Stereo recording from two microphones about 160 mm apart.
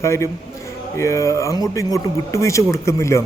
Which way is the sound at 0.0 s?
15° left (ahead or behind).